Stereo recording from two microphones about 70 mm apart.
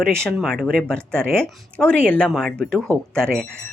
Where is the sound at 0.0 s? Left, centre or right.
Centre.